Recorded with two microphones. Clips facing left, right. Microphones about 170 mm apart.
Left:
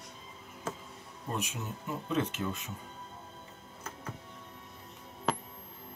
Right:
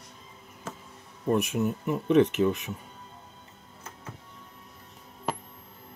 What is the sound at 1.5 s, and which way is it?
Speech, 65° right (ahead or behind).